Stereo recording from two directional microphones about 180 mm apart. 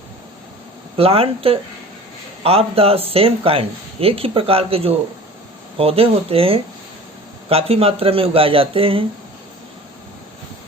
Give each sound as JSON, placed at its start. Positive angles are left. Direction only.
{"t": 0.9, "sound": "speech", "side_deg": -30}